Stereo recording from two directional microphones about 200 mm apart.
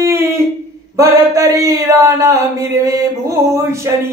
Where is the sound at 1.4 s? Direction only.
15° right (ahead or behind).